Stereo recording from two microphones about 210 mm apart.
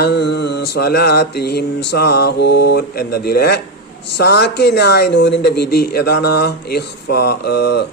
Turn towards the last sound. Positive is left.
turn(degrees=50)  # may be behind; listen again after turning